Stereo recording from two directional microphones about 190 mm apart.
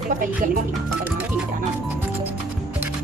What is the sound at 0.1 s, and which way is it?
Speech, 45° right (ahead or behind).